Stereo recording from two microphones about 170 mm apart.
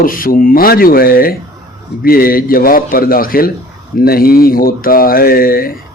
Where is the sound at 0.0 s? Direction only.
55° left (ahead or behind).